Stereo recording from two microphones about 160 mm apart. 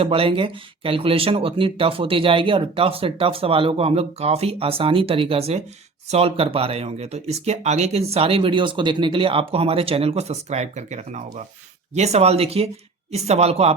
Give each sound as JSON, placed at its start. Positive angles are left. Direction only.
{"t": 0.0, "sound": "speech", "side_deg": -35}